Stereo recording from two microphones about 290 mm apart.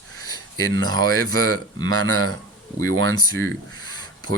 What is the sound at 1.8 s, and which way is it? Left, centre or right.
Speech, right.